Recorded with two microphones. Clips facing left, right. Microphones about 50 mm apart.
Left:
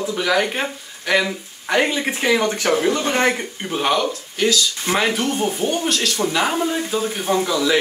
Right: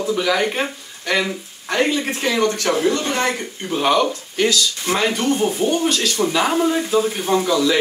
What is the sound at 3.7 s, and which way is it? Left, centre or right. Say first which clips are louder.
Speech: right 3 dB; centre.